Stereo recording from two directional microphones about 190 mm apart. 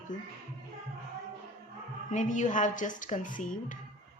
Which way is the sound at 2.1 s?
40° left (ahead or behind).